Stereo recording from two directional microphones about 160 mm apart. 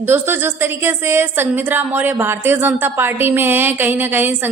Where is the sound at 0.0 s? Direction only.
15° right (ahead or behind).